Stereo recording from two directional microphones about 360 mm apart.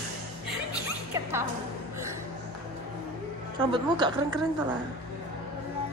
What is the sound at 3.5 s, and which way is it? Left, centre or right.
Speech, centre.